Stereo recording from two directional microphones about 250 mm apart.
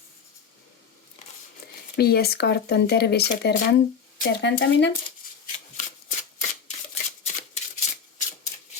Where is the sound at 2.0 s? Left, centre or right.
Left.